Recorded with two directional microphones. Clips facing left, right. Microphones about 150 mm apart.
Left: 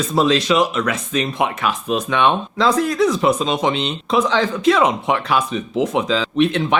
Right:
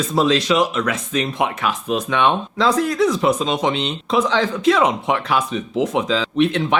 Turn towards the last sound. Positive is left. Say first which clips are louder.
# left 1 dB
turn(degrees=15)  # may be behind; listen again after turning